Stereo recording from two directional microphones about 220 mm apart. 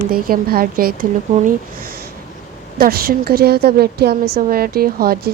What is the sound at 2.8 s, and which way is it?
A woman's voice, 40° right (ahead or behind).